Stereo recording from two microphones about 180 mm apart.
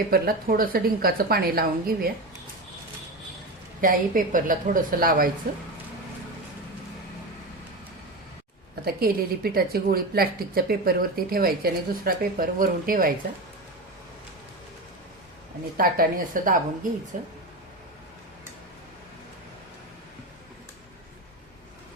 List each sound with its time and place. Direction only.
0.1 s speech: 55° right (ahead or behind)
3.8 s speech: 50° right (ahead or behind)
8.7 s speech: 55° right (ahead or behind)
15.8 s speech: 50° right (ahead or behind)